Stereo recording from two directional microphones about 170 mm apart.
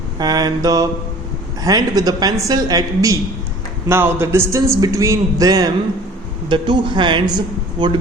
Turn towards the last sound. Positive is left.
turn(degrees=-25)  # may be behind; listen again after turning